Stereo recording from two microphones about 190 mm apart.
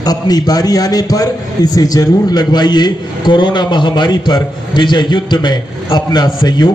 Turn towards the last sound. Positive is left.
turn(degrees=20)  # may be behind; listen again after turning